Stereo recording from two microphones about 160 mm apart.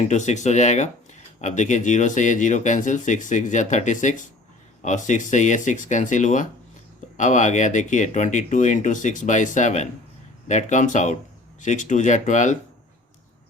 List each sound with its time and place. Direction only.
0.0 s speech: 45° left (ahead or behind)